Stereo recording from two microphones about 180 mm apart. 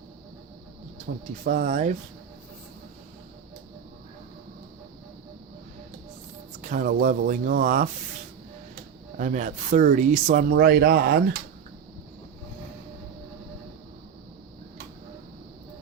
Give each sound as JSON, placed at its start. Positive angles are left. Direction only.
{"t": 1.5, "sound": "speech", "side_deg": -45}
{"t": 6.6, "sound": "speech", "side_deg": -50}
{"t": 9.1, "sound": "speech", "side_deg": -45}
{"t": 10.5, "sound": "a man's voice", "side_deg": -55}